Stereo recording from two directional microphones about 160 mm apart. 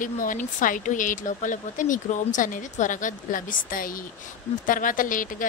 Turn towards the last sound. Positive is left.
turn(degrees=55)  # may be behind; listen again after turning